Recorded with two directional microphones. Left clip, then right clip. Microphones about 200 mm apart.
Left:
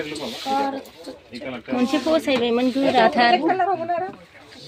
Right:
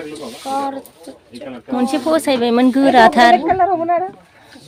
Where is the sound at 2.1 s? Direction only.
20° right (ahead or behind).